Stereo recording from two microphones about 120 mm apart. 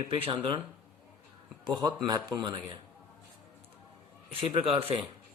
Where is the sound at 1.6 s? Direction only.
35° right (ahead or behind).